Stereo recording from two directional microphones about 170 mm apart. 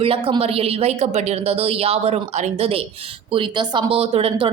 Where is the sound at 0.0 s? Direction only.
35° right (ahead or behind).